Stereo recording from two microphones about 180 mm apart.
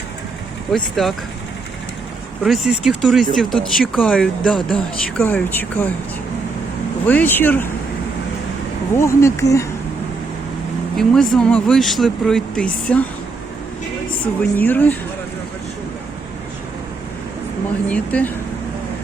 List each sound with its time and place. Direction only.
0.7 s speech: centre (ahead or behind)
2.4 s speech: centre (ahead or behind)
7.1 s speech: 10° left (ahead or behind)
9.0 s speech: 15° left (ahead or behind)
10.9 s speech: 5° left (ahead or behind)
14.5 s speech: 10° left (ahead or behind)
17.8 s speech: 10° left (ahead or behind)